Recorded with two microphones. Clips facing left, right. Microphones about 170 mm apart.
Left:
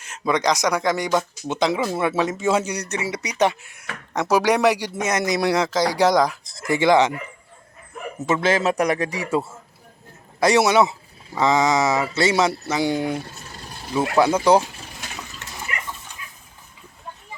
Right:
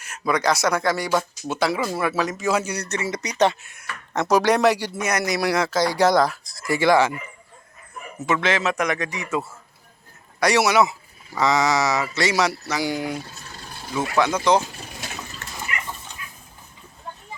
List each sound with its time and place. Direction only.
0.0 s speech: 20° left (ahead or behind)
8.3 s a man's voice: 35° left (ahead or behind)
14.3 s speech: 10° left (ahead or behind)
15.7 s a sound: 35° left (ahead or behind)